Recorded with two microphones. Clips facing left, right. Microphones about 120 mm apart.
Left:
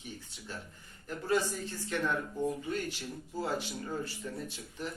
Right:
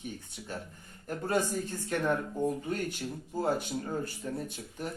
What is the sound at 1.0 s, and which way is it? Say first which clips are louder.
A man's voice: right 1 dB; 50° right (ahead or behind).